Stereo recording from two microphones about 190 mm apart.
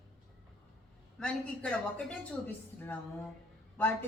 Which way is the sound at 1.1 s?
5° left (ahead or behind).